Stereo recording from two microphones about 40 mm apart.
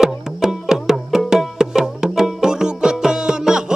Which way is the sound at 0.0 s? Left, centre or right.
Centre.